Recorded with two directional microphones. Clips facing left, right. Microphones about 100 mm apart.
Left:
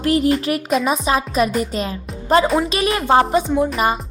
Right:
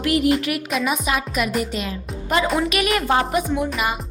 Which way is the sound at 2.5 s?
30° left (ahead or behind).